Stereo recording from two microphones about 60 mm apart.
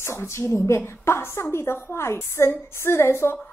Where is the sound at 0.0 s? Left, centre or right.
Left.